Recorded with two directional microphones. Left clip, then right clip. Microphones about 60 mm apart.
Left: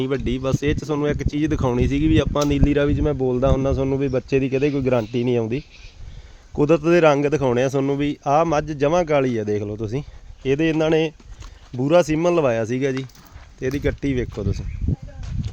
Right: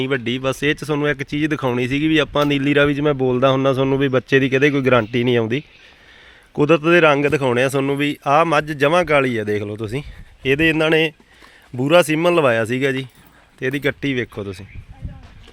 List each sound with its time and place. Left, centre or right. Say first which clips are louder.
0.0 s speech: right 3 dB; centre; by 1.7 s left
1.7 s speech: right 2 dB; left
2.3 s speech: right 3 dB; centre
3.0 s speech: right 4 dB; right
4.3 s speech: right 5 dB; centre
6.6 s speech: right 2 dB; centre
9.0 s speech: right 3 dB; left
9.7 s speech: right 1 dB; left
10.4 s speech: right 3 dB; centre
14.0 s speech: right 2 dB; left
14.3 s speech: even; left